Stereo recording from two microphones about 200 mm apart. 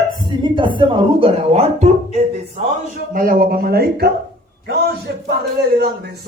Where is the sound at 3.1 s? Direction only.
45° right (ahead or behind).